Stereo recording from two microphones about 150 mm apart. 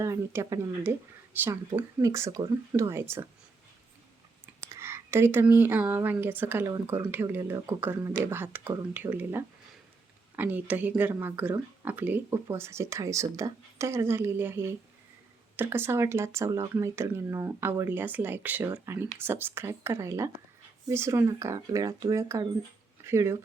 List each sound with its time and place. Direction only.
0.0 s speech: 20° right (ahead or behind)
4.7 s speech: 15° right (ahead or behind)